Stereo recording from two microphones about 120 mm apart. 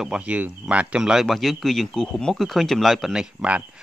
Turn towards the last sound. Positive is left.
turn(degrees=-5)  # may be behind; listen again after turning